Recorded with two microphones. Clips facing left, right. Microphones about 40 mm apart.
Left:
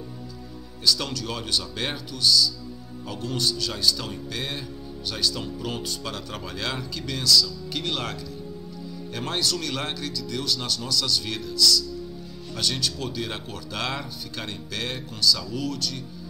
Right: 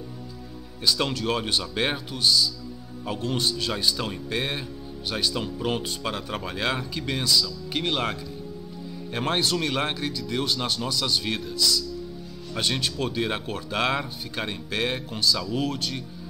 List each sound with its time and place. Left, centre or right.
0.8 s speech: right